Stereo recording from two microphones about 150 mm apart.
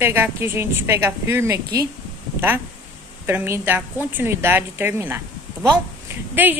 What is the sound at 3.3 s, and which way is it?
A woman's voice, 15° right (ahead or behind).